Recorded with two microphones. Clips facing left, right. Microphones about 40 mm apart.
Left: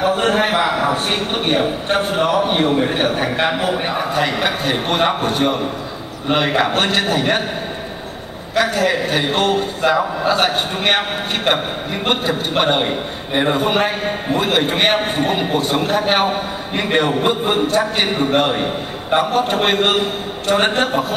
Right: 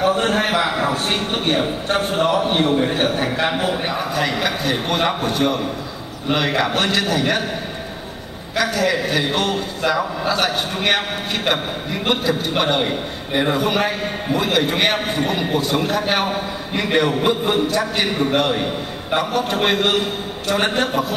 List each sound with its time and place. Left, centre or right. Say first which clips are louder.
0.0 s a man's voice: left 2 dB; left
1.1 s a man's voice: left 2 dB; centre
1.9 s a man's voice: even; left
2.2 s a man's voice: left 1 dB; left
2.5 s a man's voice: left 1 dB; left
4.1 s a man's voice: left 3 dB; left
8.5 s a man's voice: left 2 dB; left
17.3 s a man's voice: left 1 dB; left
19.1 s a man's voice: left 4 dB; left